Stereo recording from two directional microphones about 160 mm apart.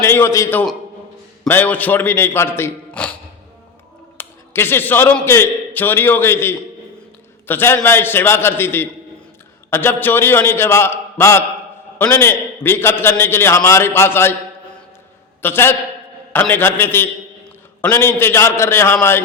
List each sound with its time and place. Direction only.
0.0 s a man's voice: 15° left (ahead or behind)
4.2 s a man's voice: 15° left (ahead or behind)
15.4 s a man's voice: 15° left (ahead or behind)